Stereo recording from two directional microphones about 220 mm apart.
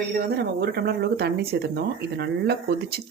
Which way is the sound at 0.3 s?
45° right (ahead or behind).